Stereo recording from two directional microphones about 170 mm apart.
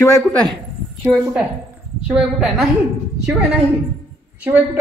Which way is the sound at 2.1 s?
5° right (ahead or behind).